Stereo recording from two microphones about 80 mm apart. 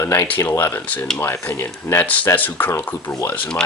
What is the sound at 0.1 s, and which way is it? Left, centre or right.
Speech, left.